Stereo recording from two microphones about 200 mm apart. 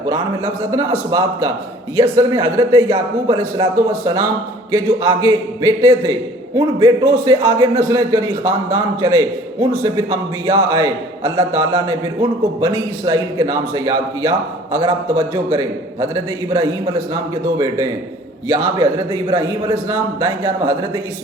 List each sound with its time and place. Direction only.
0.1 s a man's voice: 20° right (ahead or behind)
18.4 s a man's voice: 20° right (ahead or behind)